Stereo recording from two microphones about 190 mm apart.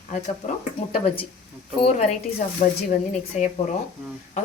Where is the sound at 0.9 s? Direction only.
30° left (ahead or behind).